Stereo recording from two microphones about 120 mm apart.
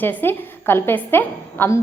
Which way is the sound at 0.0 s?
15° left (ahead or behind).